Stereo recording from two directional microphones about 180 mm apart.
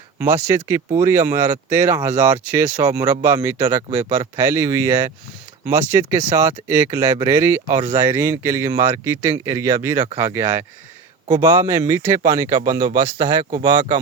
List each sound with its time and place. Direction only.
0.2 s a man's voice: 10° right (ahead or behind)